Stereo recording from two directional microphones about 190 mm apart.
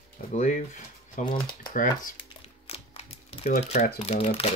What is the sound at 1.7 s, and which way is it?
Crumpling, 45° left (ahead or behind).